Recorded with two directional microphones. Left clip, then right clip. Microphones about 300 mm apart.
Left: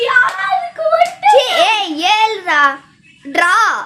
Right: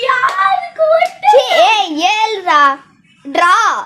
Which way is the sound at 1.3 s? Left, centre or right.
Centre.